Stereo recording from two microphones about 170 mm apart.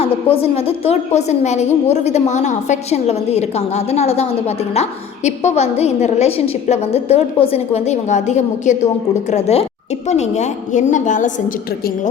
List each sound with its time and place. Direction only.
0.0 s a woman's voice: 35° left (ahead or behind)